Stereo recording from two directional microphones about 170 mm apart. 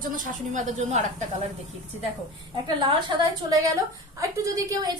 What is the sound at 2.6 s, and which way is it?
A woman's voice, 25° right (ahead or behind).